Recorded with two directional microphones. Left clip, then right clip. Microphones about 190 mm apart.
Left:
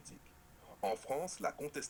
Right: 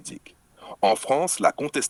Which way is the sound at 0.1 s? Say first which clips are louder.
Right 15 dB; 55° right (ahead or behind).